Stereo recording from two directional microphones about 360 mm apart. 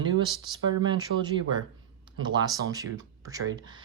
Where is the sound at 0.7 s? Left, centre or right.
Centre.